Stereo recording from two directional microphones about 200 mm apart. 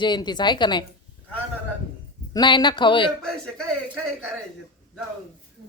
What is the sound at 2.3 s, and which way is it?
Speech, 20° left (ahead or behind).